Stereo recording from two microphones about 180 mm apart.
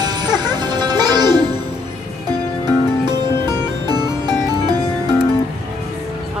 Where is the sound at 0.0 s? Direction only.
25° right (ahead or behind).